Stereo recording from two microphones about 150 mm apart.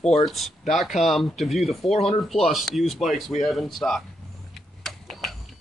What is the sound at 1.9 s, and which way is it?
Speech, 40° left (ahead or behind).